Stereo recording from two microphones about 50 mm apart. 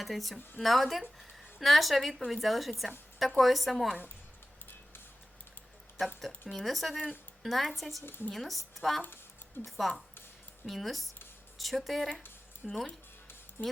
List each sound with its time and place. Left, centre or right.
0.0 s speech: centre
6.5 s speech: centre
13.6 s speech: left